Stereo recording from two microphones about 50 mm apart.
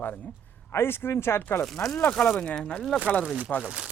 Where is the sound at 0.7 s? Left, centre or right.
Left.